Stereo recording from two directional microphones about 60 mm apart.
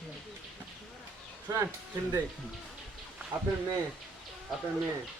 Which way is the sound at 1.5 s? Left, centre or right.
Right.